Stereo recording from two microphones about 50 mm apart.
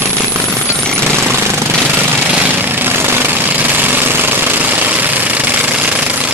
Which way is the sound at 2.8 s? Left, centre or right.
Right.